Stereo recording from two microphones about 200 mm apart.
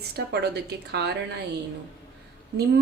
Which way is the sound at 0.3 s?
55° right (ahead or behind).